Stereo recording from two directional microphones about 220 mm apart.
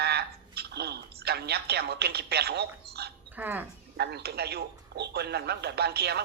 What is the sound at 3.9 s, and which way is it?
A man's voice, 50° right (ahead or behind).